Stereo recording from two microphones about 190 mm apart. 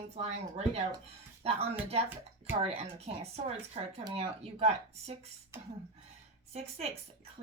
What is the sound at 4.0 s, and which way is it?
A woman's voice, 30° right (ahead or behind).